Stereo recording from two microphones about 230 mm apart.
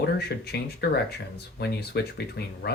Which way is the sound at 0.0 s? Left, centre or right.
Left.